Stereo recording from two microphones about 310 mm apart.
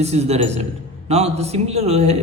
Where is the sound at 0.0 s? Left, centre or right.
Right.